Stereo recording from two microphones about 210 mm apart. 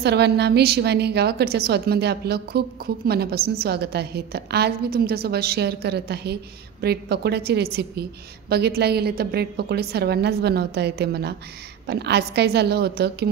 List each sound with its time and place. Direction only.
0.0 s a woman's voice: 50° right (ahead or behind)